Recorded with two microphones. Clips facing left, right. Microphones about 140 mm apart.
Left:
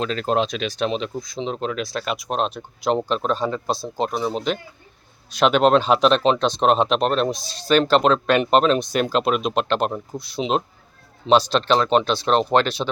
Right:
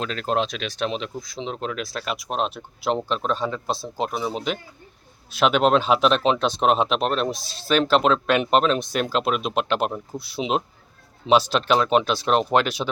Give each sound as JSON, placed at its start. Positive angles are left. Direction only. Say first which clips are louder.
{"t": 0.0, "sound": "speech", "louder": "left 3 dB", "side_deg": 0}